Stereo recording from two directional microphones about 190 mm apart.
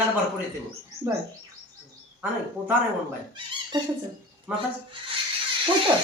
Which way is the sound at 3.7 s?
20° right (ahead or behind).